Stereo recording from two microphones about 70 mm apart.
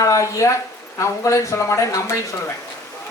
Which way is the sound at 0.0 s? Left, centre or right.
Left.